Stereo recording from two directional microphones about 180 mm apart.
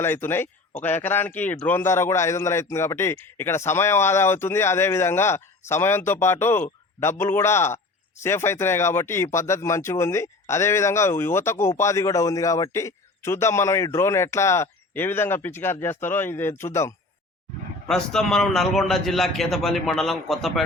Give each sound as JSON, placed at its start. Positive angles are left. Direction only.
{"t": 0.0, "sound": "speech", "side_deg": 15}
{"t": 17.8, "sound": "a man's voice", "side_deg": 5}